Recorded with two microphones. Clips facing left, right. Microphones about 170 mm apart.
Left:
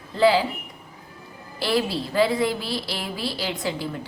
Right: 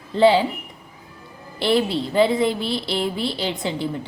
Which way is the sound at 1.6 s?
25° right (ahead or behind).